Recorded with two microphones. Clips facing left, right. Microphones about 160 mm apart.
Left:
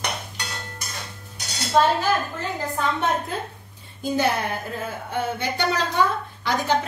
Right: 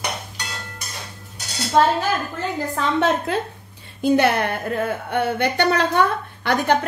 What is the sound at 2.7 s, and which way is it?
Speech, 90° right.